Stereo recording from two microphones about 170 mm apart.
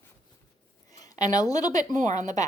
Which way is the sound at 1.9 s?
45° right (ahead or behind).